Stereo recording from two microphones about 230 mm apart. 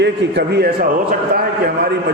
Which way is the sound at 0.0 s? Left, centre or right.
Right.